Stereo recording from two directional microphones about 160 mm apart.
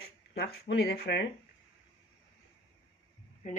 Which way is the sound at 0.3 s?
80° left.